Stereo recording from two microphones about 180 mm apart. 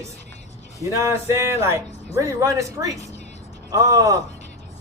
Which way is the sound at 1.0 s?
15° right (ahead or behind).